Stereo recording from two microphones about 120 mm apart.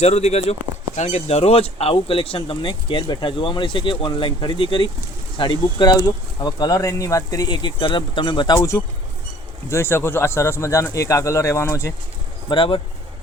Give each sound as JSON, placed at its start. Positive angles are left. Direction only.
{"t": 0.0, "sound": "speech", "side_deg": 65}
{"t": 9.6, "sound": "speech", "side_deg": 20}
{"t": 12.5, "sound": "speech", "side_deg": 45}